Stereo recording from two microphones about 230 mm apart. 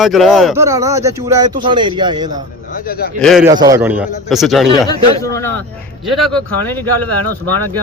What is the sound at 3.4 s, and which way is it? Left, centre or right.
Speech, centre.